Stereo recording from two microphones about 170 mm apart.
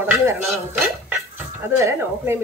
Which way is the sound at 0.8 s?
Centre (ahead or behind).